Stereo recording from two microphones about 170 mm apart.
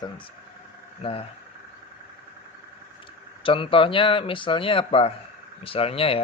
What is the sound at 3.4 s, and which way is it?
Speech, 30° left (ahead or behind).